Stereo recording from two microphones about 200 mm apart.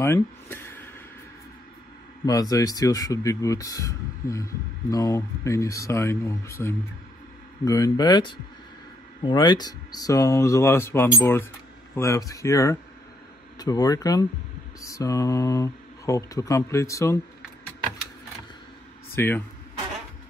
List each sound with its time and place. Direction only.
0.0 s speech: 10° left (ahead or behind)
2.2 s speech: 20° left (ahead or behind)
19.1 s speech: 10° left (ahead or behind)